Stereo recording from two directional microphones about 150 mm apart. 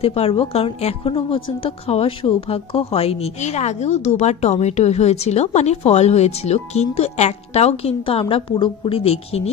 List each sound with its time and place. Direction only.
0.0 s a woman's voice: 40° left (ahead or behind)